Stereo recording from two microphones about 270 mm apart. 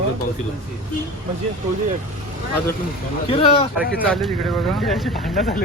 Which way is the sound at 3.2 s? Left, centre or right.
Centre.